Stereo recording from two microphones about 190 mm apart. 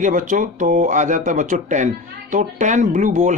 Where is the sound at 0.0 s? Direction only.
45° right (ahead or behind).